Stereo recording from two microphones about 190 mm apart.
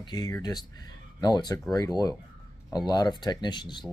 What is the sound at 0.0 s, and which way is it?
Speech, 20° left (ahead or behind).